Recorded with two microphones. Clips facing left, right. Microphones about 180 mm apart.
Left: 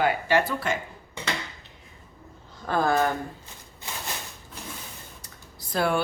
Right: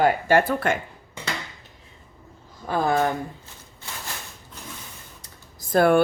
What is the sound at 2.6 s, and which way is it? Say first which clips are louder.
Speech: right 1 dB; 10° right (ahead or behind).